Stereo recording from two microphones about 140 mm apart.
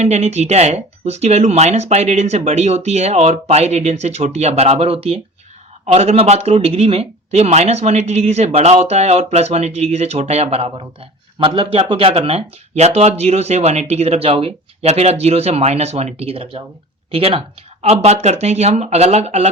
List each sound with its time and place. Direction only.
0.0 s speech: 55° right (ahead or behind)